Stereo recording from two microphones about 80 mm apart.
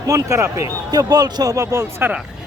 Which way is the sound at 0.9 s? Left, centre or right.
Right.